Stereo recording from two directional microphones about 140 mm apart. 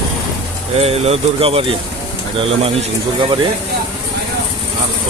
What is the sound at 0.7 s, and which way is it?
Speech, 45° right (ahead or behind).